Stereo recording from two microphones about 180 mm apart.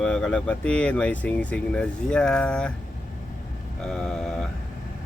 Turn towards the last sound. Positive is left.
turn(degrees=5)  # may be behind; listen again after turning